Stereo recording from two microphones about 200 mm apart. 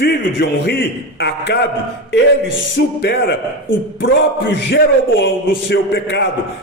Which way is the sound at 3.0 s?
55° left (ahead or behind).